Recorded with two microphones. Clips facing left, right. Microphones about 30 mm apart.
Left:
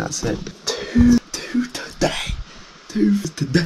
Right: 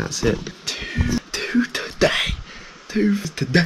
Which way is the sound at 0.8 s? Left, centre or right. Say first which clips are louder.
Left 11 dB; right.